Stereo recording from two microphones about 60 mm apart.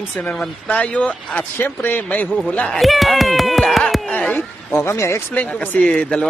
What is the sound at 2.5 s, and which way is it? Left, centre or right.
Speech, centre.